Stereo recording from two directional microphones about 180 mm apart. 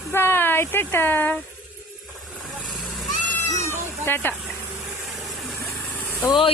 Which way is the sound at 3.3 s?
10° left (ahead or behind).